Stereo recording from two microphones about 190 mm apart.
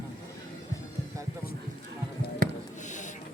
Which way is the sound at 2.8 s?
40° left (ahead or behind).